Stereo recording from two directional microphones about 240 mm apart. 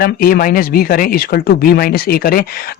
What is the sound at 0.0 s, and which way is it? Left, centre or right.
A man's voice, left.